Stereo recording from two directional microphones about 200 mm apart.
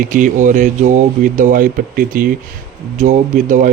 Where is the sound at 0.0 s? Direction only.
40° right (ahead or behind).